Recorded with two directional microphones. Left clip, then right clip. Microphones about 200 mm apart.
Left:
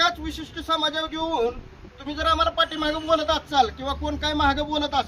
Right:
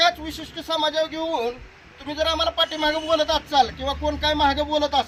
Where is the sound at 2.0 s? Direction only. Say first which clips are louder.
Left 1 dB; centre (ahead or behind).